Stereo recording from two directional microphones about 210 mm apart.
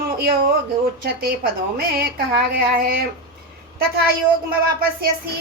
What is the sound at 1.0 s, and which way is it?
Speech, 45° right (ahead or behind).